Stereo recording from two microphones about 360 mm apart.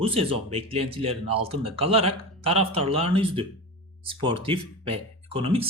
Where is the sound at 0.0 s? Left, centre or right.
Centre.